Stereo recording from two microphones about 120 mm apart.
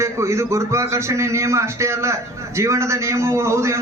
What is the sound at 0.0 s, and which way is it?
A man's voice, 25° right (ahead or behind).